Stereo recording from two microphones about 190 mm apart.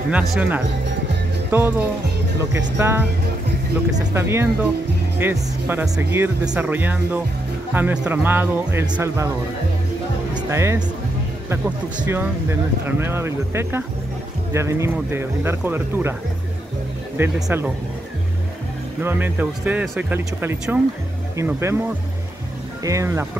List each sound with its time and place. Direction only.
0.1 s speech: 5° right (ahead or behind)
4.1 s speech: 15° right (ahead or behind)
10.3 s music: 15° right (ahead or behind)
12.0 s speech: 15° right (ahead or behind)
17.2 s speech: 10° right (ahead or behind)
19.0 s speech: 10° right (ahead or behind)
22.8 s speech: 15° right (ahead or behind)